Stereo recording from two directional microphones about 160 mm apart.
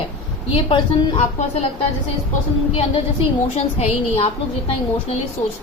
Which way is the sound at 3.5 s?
40° left (ahead or behind).